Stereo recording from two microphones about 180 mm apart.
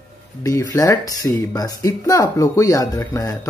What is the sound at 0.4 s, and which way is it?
Speech, 20° left (ahead or behind).